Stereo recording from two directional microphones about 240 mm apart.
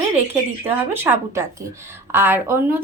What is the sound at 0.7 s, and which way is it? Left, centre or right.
A woman's voice, centre.